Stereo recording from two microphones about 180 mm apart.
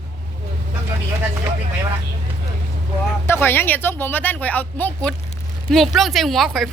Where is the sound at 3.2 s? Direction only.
15° left (ahead or behind).